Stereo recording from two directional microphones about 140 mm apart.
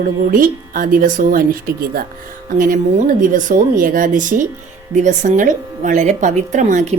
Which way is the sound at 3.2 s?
70° right (ahead or behind).